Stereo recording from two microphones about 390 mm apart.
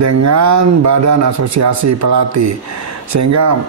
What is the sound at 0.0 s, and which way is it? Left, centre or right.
Speech, right.